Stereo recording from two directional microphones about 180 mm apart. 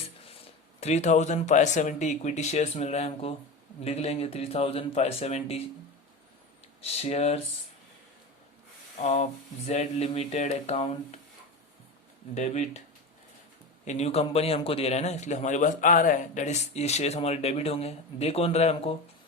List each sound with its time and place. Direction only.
0.8 s a man's voice: 40° left (ahead or behind)
6.8 s a man's voice: 35° left (ahead or behind)
9.0 s a man's voice: 40° left (ahead or behind)
12.3 s a man's voice: 40° left (ahead or behind)
13.8 s a man's voice: 40° left (ahead or behind)